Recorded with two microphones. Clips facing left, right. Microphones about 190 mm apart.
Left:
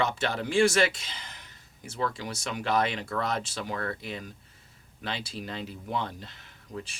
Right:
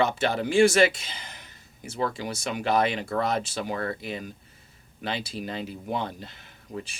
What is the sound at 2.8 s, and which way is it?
Speech, 10° right (ahead or behind).